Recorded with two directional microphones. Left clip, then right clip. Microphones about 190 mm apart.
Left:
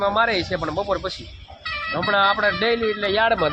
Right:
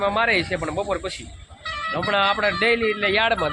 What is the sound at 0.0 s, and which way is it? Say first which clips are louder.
Speech: even; 10° left (ahead or behind).